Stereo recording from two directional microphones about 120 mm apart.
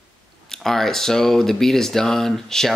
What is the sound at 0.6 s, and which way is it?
Speech, 5° left (ahead or behind).